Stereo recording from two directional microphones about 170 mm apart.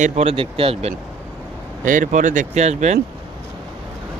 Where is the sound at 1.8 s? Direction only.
50° right (ahead or behind).